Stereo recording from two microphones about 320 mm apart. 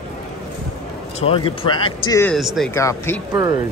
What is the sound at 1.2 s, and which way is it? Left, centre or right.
Speech, centre.